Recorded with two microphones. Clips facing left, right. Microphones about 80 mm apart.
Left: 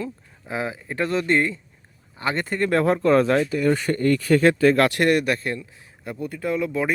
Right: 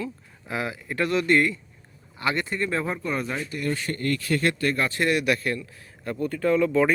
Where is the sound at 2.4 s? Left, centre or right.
Left.